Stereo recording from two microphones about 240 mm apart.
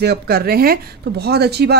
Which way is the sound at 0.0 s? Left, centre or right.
Right.